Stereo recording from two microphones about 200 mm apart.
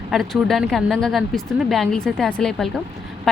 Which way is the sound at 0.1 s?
Centre (ahead or behind).